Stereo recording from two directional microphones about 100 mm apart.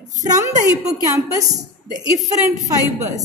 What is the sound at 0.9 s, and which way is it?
A woman's voice, 35° right (ahead or behind).